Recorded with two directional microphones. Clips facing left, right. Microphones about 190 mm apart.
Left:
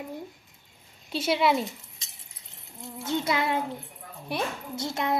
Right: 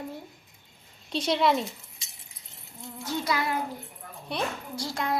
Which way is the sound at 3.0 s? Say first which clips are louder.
Left 2 dB; 25° left (ahead or behind).